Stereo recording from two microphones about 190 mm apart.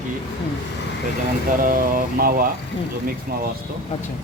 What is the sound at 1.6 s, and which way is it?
Speech, 50° right (ahead or behind).